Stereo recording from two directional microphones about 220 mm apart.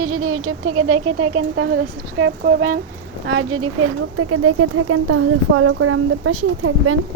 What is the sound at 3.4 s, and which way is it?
Speech, 80° right.